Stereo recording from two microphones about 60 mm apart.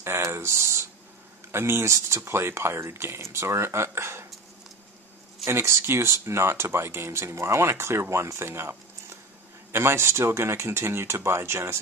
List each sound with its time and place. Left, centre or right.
0.0 s a sound: right
1.5 s speech: right
5.4 s speech: right